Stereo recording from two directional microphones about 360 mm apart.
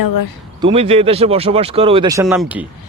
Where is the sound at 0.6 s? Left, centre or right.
Centre.